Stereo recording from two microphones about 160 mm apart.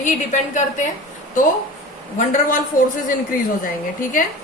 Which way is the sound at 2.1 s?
55° left (ahead or behind).